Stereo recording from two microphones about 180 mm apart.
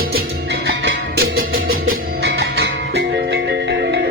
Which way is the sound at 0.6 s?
70° right (ahead or behind).